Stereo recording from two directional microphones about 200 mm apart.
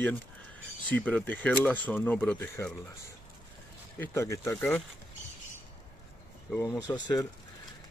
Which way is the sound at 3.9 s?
15° left (ahead or behind).